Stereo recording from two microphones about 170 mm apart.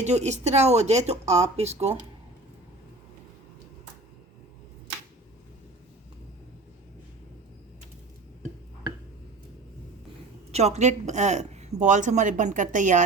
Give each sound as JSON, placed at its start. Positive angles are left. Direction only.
{"t": 0.0, "sound": "speech", "side_deg": -40}
{"t": 10.5, "sound": "speech", "side_deg": -40}